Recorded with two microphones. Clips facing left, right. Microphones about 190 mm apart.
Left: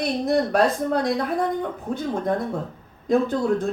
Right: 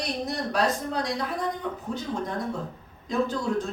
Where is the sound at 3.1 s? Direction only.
55° left (ahead or behind).